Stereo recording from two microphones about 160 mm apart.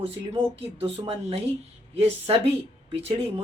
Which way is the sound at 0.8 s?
35° right (ahead or behind).